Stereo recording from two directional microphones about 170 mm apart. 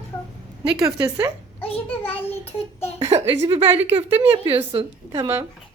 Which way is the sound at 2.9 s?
40° right (ahead or behind).